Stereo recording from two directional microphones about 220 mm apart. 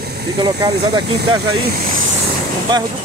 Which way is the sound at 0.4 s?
20° right (ahead or behind).